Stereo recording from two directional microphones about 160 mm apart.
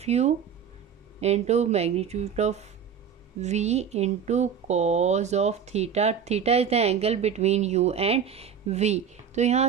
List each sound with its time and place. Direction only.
0.0 s speech: 45° right (ahead or behind)